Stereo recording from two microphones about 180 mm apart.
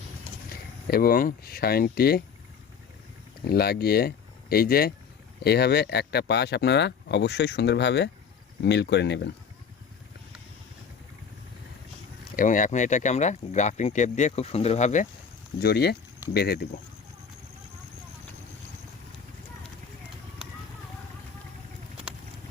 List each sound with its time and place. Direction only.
0.5 s speech: 55° left (ahead or behind)
3.4 s speech: 60° left (ahead or behind)
12.4 s speech: 45° left (ahead or behind)
15.6 s speech: 60° left (ahead or behind)